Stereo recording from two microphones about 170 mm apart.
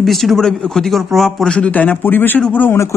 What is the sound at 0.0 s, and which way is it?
Speech, centre (ahead or behind).